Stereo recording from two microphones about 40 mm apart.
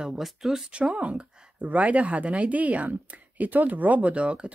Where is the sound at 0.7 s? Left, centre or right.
Right.